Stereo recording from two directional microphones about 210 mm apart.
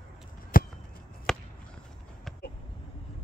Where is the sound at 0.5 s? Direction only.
40° left (ahead or behind).